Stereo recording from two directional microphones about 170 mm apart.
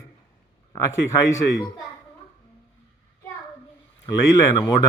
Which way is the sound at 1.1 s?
15° left (ahead or behind).